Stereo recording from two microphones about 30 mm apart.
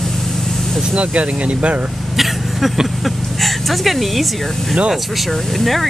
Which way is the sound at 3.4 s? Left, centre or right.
Centre.